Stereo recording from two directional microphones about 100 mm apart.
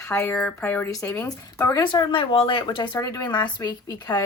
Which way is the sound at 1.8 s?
50° left (ahead or behind).